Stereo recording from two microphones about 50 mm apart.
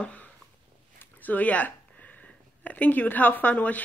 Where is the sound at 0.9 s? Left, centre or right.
Left.